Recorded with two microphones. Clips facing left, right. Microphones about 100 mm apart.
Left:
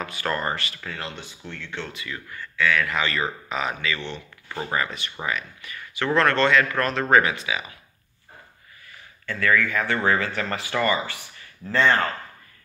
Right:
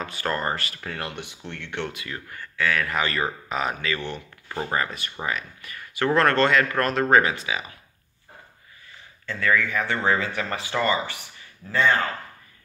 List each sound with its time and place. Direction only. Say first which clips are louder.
0.0 s speech: even; 35° right (ahead or behind); by 1.9 s 65° right (ahead or behind)
2.0 s speech: even; 40° right (ahead or behind)
5.2 s speech: even; 40° right (ahead or behind)
9.2 s speech: left 1 dB; 20° right (ahead or behind)
11.7 s speech: left 1 dB; 5° right (ahead or behind)